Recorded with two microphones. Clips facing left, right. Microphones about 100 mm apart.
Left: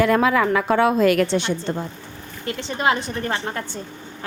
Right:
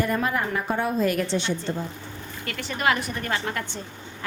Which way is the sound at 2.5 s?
25° left (ahead or behind).